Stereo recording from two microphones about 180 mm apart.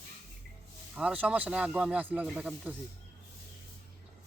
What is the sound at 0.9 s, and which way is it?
Speech, 10° right (ahead or behind).